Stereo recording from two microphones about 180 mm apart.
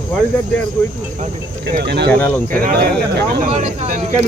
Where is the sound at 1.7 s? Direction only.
70° right (ahead or behind).